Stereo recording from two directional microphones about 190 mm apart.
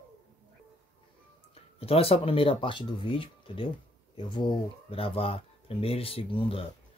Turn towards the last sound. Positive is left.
turn(degrees=30)  # may be behind; listen again after turning